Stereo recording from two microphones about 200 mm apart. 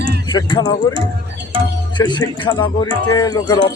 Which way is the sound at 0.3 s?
25° left (ahead or behind).